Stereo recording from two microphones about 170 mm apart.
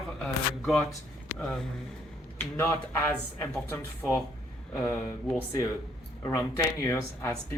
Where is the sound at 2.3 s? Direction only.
15° left (ahead or behind).